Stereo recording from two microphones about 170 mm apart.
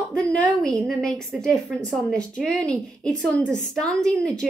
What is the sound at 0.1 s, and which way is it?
A woman's voice, 5° left (ahead or behind).